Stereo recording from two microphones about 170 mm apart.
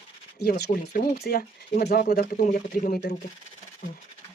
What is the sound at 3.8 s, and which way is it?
Speech, 50° left (ahead or behind).